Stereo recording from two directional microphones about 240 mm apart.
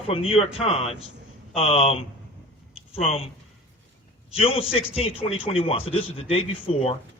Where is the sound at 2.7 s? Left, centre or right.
Left.